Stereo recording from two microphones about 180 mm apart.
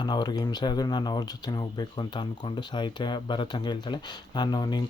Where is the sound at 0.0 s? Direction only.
25° left (ahead or behind).